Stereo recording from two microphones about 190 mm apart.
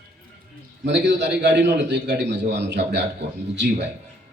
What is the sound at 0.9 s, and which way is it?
A man's voice, 65° right (ahead or behind).